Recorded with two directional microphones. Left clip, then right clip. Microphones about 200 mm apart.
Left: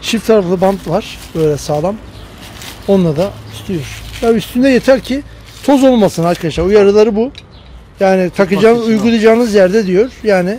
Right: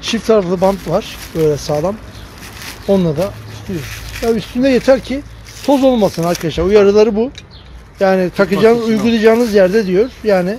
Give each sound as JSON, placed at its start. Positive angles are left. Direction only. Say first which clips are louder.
{"t": 0.0, "sound": "speech", "louder": "left 2 dB", "side_deg": 15}
{"t": 4.6, "sound": "speech", "louder": "even", "side_deg": 15}